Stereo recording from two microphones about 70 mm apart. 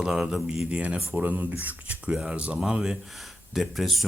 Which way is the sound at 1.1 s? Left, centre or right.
Right.